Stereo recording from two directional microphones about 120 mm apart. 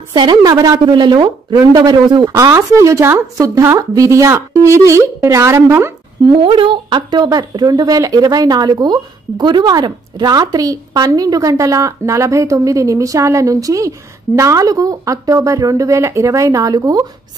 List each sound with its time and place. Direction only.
0.1 s speech: 40° right (ahead or behind); by 5.9 s 20° right (ahead or behind)
6.4 s speech: 45° right (ahead or behind); by 17.0 s 30° right (ahead or behind)